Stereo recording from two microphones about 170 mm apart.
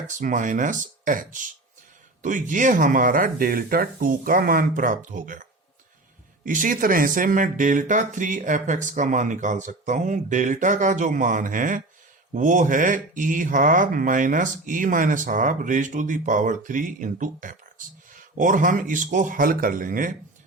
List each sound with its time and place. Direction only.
0.1 s speech: 50° right (ahead or behind)